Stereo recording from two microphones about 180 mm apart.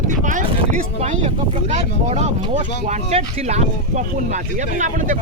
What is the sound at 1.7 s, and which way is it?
Speech, 40° right (ahead or behind).